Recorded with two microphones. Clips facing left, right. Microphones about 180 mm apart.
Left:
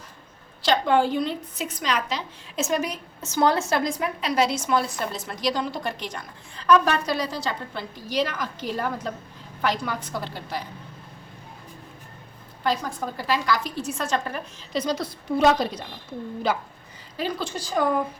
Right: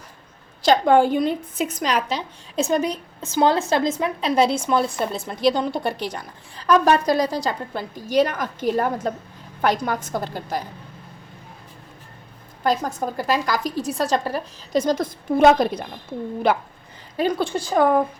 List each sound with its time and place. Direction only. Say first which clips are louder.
0.6 s a woman's voice: right 5 dB; 45° right (ahead or behind)
2.6 s a woman's voice: right 5 dB; 30° right (ahead or behind)
3.2 s a woman's voice: right 3 dB; 15° right (ahead or behind); by 10.6 s 45° right (ahead or behind)
12.6 s a woman's voice: right 4 dB; 45° right (ahead or behind)